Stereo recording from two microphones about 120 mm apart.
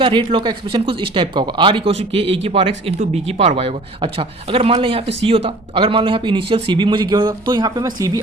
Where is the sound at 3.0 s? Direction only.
65° right (ahead or behind).